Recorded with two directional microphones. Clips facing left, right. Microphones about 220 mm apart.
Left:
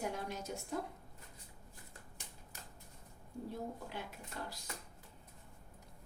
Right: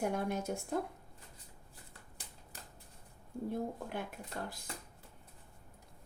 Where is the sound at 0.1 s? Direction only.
55° right (ahead or behind).